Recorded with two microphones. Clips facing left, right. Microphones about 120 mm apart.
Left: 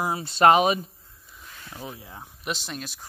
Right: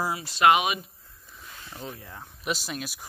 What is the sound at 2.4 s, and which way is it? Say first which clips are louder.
Speech: right 1 dB; 5° right (ahead or behind).